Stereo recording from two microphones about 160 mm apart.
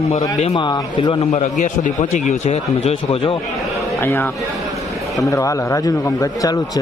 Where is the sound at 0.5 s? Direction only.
25° left (ahead or behind).